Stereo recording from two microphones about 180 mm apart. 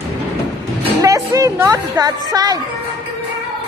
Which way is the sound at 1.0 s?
20° right (ahead or behind).